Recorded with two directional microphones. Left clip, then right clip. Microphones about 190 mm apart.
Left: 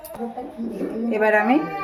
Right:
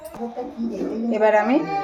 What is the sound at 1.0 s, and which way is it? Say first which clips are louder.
Speech: right 1 dB; 35° left (ahead or behind).